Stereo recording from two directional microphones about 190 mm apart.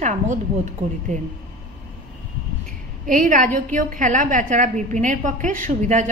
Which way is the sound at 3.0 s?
45° right (ahead or behind).